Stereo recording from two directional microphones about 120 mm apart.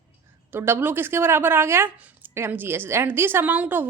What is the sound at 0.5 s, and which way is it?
Speech, 20° right (ahead or behind).